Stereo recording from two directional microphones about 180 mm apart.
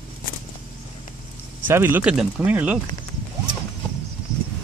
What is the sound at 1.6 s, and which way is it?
Speech, 10° right (ahead or behind).